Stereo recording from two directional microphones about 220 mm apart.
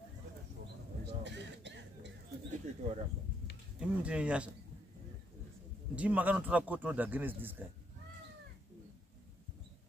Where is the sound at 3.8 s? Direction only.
5° right (ahead or behind).